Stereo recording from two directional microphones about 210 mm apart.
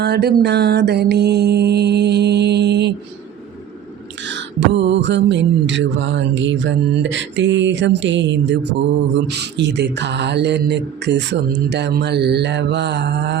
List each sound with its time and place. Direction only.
0.0 s mantra: 50° right (ahead or behind)
4.2 s mantra: 60° right (ahead or behind)